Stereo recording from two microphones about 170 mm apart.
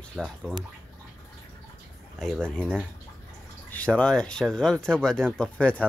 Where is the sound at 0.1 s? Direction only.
5° left (ahead or behind).